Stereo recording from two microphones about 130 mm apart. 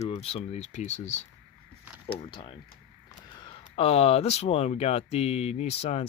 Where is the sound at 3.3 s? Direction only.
35° left (ahead or behind).